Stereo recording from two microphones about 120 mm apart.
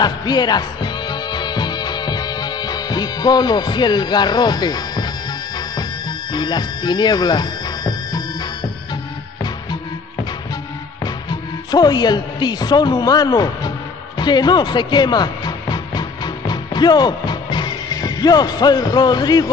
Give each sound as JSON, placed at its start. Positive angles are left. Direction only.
{"t": 0.0, "sound": "music", "side_deg": 35}
{"t": 11.2, "sound": "music", "side_deg": 35}